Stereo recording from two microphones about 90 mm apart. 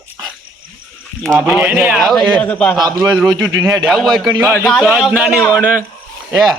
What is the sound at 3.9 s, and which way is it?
A man's voice, centre (ahead or behind).